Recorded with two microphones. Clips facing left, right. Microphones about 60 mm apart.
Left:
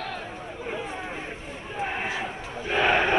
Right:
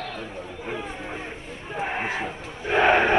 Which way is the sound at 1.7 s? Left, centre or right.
Right.